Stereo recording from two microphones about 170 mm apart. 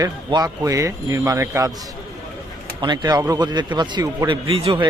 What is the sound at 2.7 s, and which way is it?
Speech, 25° right (ahead or behind).